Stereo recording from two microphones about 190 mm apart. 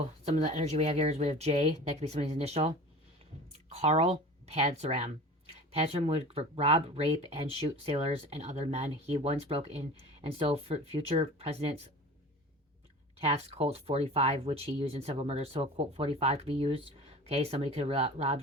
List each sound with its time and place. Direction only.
0.3 s speech: 35° right (ahead or behind)
13.1 s speech: 30° right (ahead or behind)